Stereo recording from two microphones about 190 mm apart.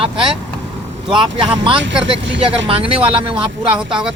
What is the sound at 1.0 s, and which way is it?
Speech, 25° right (ahead or behind).